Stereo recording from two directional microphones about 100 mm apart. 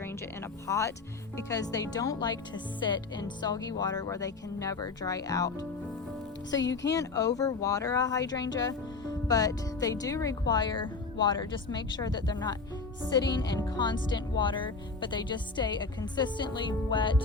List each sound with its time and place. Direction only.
0.7 s speech: 30° left (ahead or behind); by 17.2 s 55° left (ahead or behind)